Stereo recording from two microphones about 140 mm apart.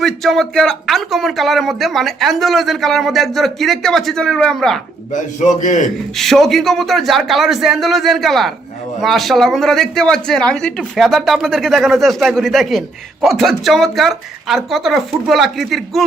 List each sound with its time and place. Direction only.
0.0 s a man's voice: centre (ahead or behind)
5.1 s a man's voice: 60° left (ahead or behind)
6.1 s a man's voice: centre (ahead or behind)